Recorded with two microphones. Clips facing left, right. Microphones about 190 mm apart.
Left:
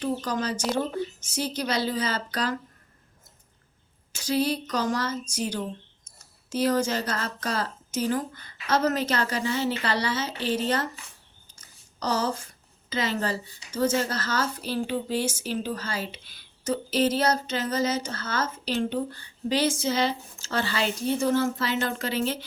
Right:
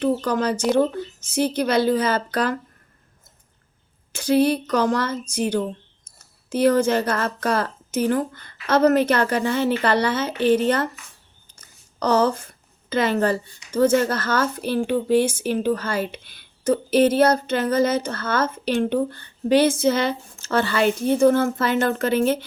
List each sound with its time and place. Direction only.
0.0 s speech: 60° right (ahead or behind)
4.1 s speech: 55° right (ahead or behind)
11.5 s a sound: 55° right (ahead or behind)
12.9 s speech: 55° right (ahead or behind)